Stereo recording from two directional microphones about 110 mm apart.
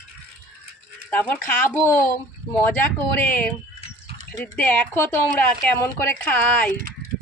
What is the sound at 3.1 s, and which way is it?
Speech, 15° left (ahead or behind).